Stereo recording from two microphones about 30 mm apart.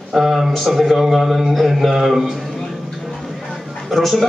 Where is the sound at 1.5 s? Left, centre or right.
Centre.